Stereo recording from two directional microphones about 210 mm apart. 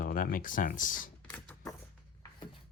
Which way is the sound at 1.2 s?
5° left (ahead or behind).